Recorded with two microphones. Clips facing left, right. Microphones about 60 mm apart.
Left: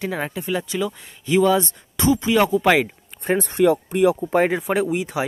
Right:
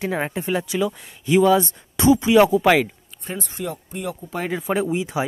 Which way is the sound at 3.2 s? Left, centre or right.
Left.